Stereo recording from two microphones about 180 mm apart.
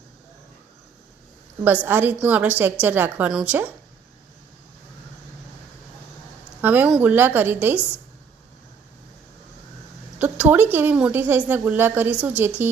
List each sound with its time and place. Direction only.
1.6 s speech: 10° right (ahead or behind)
6.6 s speech: 10° right (ahead or behind)
10.2 s speech: 10° right (ahead or behind)